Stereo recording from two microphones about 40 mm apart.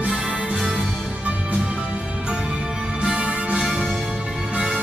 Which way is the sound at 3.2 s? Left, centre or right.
Right.